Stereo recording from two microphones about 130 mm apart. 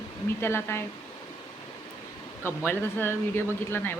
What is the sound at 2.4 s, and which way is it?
Speech, 15° left (ahead or behind).